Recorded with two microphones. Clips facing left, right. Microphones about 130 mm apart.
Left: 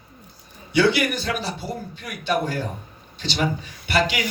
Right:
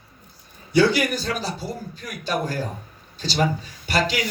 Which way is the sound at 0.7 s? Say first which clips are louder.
Right 1 dB; 40° right (ahead or behind).